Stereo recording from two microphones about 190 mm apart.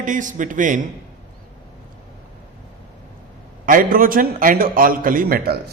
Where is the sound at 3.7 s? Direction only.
45° right (ahead or behind).